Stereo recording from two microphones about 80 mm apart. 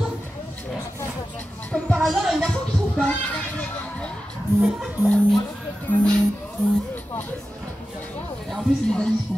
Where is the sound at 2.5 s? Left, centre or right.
Centre.